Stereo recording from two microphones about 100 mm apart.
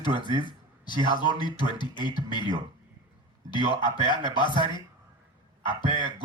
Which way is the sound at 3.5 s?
50° left (ahead or behind).